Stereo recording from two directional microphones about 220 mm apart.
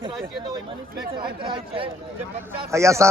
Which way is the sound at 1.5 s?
25° right (ahead or behind).